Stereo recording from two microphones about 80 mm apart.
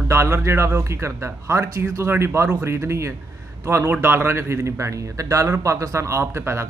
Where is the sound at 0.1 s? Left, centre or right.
Right.